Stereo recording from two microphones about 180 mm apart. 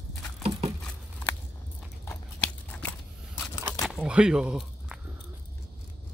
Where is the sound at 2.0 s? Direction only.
10° left (ahead or behind).